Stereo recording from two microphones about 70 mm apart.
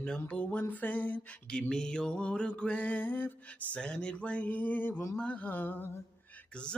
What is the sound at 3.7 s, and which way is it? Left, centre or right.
Mantra, centre.